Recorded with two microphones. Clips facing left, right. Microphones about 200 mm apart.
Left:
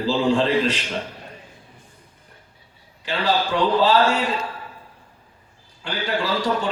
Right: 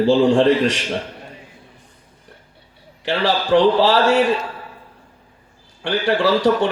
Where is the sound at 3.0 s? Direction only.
80° right.